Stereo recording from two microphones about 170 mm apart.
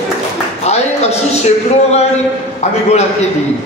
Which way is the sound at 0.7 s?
40° left (ahead or behind).